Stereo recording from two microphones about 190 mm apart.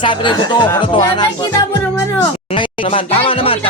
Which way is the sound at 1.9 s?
15° left (ahead or behind).